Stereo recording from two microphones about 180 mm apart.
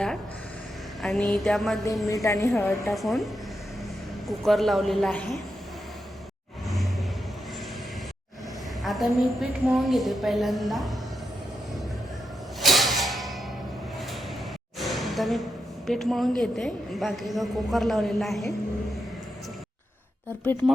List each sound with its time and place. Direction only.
1.0 s a woman's voice: centre (ahead or behind)
1.8 s a man's voice: 20° left (ahead or behind)
2.6 s a woman's voice: centre (ahead or behind)
4.3 s a woman's voice: centre (ahead or behind)
8.8 s a woman's voice: centre (ahead or behind)
12.5 s music: centre (ahead or behind)
14.8 s a sound: centre (ahead or behind)
15.9 s a woman's voice: centre (ahead or behind)